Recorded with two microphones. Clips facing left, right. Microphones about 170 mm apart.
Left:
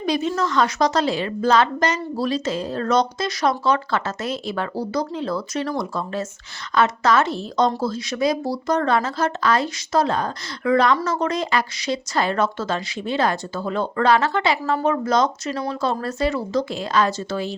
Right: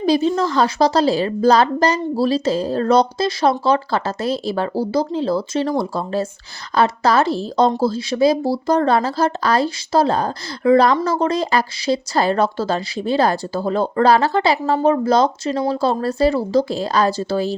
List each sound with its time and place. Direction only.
0.0 s a woman's voice: 30° right (ahead or behind)